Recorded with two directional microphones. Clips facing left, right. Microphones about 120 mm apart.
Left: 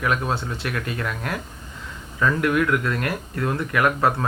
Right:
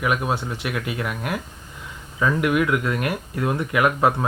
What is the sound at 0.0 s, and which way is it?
Speech, 15° right (ahead or behind).